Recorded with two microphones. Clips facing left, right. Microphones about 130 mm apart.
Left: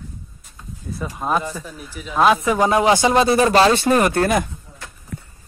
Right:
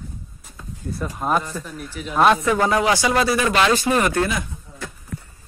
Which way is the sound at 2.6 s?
25° left (ahead or behind).